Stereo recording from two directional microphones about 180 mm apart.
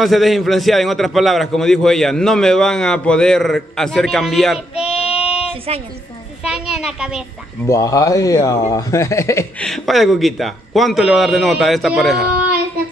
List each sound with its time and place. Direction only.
0.0 s a man's voice: centre (ahead or behind)
5.0 s child singing: 5° right (ahead or behind)
5.7 s a woman's voice: 35° right (ahead or behind)
6.4 s a man's voice: 5° right (ahead or behind)
7.6 s speech: 15° left (ahead or behind)
9.7 s a man's voice: centre (ahead or behind)